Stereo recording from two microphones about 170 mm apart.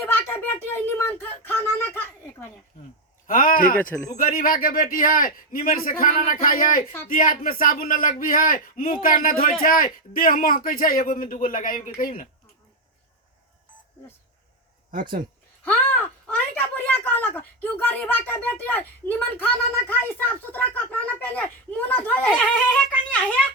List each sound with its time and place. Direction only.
0.0 s a sound: 15° left (ahead or behind)
3.2 s speech: 55° left (ahead or behind)
3.8 s speech: 10° left (ahead or behind)
4.1 s a man's voice: 55° left (ahead or behind)
15.6 s speech: 10° left (ahead or behind)